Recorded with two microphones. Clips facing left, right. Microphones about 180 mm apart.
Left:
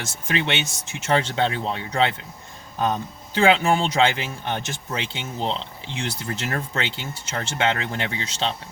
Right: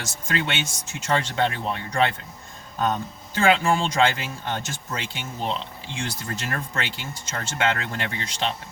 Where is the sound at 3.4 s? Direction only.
20° left (ahead or behind).